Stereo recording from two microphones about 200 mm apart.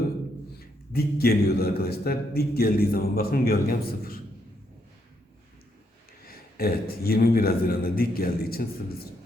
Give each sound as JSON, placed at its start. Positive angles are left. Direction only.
{"t": 0.9, "sound": "a man's voice", "side_deg": 50}
{"t": 6.2, "sound": "a man's voice", "side_deg": 50}